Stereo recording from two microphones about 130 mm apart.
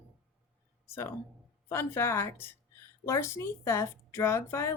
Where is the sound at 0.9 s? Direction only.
20° left (ahead or behind).